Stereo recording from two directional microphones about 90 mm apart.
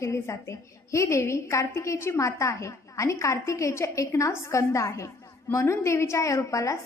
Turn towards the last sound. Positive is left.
turn(degrees=35)  # may be behind; listen again after turning